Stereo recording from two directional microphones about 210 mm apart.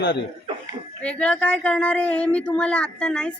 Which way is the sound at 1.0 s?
5° left (ahead or behind).